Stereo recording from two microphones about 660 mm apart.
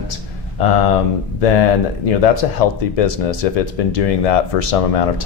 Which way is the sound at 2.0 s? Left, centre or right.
Left.